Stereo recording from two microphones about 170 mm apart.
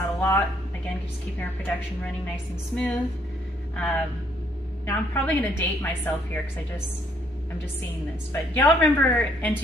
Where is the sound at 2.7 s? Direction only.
5° left (ahead or behind).